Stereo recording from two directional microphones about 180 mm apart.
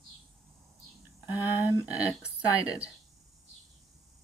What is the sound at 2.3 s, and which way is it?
Speech, 5° right (ahead or behind).